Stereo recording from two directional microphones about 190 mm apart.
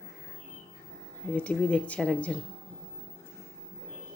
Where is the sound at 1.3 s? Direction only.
5° left (ahead or behind).